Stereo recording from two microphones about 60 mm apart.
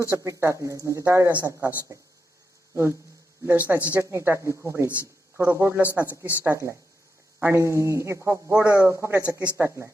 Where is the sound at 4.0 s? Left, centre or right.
Right.